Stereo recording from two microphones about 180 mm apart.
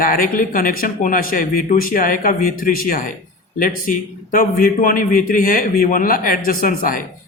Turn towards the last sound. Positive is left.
turn(degrees=50)  # may be behind; listen again after turning